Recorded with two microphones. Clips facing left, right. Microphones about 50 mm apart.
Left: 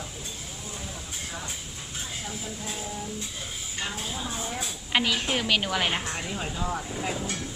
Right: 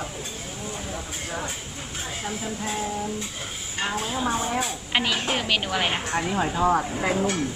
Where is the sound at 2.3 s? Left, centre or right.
Right.